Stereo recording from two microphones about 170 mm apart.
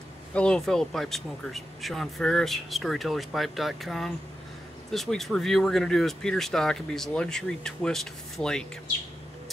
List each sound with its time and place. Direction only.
0.3 s speech: 5° left (ahead or behind)